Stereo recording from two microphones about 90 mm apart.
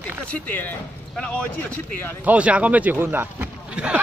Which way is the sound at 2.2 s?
15° right (ahead or behind).